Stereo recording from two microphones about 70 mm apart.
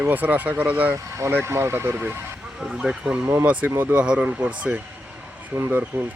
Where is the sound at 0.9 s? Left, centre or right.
Right.